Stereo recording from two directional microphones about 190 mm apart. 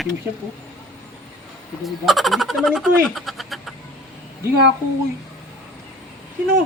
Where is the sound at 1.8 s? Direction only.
Centre (ahead or behind).